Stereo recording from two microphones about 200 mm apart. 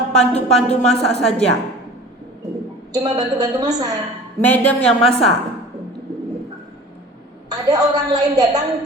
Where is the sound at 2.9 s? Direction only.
20° right (ahead or behind).